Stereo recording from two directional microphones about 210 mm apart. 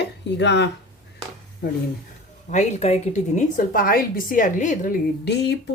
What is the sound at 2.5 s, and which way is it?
A woman's voice, 35° left (ahead or behind).